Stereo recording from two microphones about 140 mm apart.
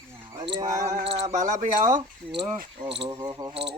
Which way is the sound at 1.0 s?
40° right (ahead or behind).